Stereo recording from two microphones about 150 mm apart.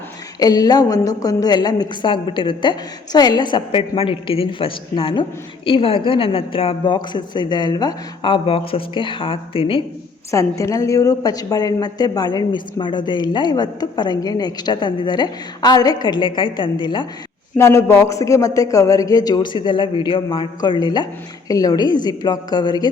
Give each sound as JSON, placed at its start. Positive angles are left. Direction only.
{"t": 0.3, "sound": "a woman's voice", "side_deg": 25}
{"t": 10.3, "sound": "a woman's voice", "side_deg": 20}
{"t": 17.6, "sound": "a woman's voice", "side_deg": 15}